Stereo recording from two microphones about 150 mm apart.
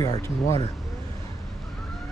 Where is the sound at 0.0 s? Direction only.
20° left (ahead or behind).